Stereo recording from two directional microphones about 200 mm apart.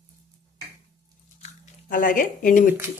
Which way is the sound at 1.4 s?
40° left (ahead or behind).